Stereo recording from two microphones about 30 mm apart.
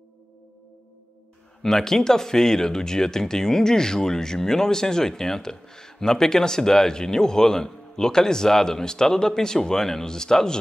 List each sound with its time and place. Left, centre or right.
1.6 s speech: centre